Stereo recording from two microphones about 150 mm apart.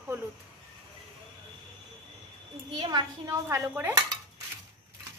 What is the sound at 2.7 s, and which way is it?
Speech, 30° right (ahead or behind).